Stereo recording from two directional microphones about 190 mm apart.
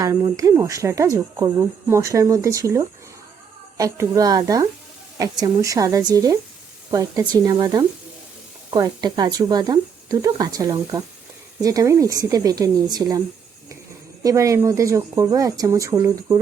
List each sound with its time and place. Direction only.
0.0 s speech: 20° right (ahead or behind)
14.3 s speech: 15° right (ahead or behind)